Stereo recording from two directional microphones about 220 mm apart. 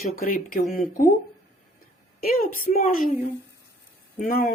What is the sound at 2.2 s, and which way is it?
Speech, 40° left (ahead or behind).